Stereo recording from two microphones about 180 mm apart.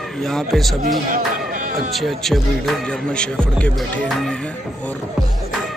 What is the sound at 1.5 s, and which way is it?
Music, 50° right (ahead or behind).